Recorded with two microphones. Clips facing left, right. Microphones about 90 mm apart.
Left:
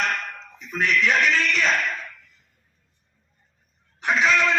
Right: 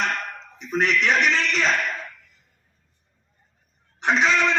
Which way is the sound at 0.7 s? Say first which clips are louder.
Right 1 dB; 25° right (ahead or behind).